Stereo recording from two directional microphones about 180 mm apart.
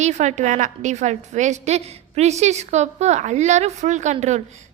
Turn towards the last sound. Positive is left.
turn(degrees=-40)  # may be behind; listen again after turning